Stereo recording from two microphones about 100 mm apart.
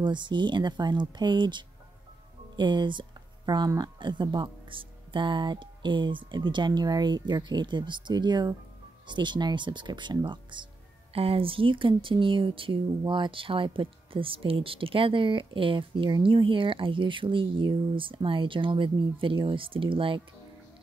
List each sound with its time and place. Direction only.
0.0 s speech: 50° right (ahead or behind)
11.1 s speech: 70° right (ahead or behind)